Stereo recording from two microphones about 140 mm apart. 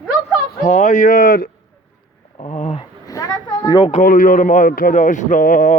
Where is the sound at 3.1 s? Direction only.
25° left (ahead or behind).